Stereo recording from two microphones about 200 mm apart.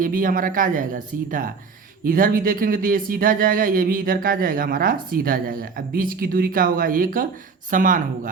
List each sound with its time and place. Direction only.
0.0 s speech: 45° right (ahead or behind)